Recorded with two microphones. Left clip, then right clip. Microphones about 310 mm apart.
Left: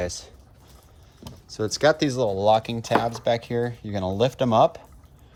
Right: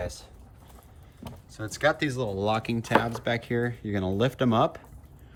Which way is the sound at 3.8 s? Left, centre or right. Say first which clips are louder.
Left 5 dB; centre.